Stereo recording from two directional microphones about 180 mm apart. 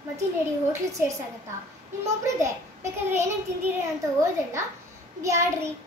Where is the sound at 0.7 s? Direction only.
15° right (ahead or behind).